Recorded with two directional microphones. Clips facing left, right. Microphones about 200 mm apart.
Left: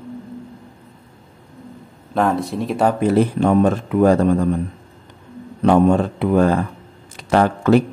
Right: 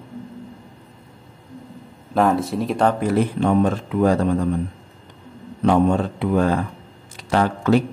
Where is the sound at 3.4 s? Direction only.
50° left (ahead or behind).